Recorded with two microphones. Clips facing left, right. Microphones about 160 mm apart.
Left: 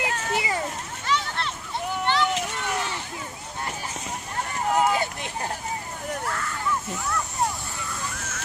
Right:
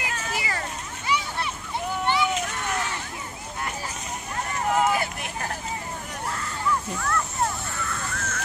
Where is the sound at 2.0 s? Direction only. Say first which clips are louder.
Even; 10° right (ahead or behind).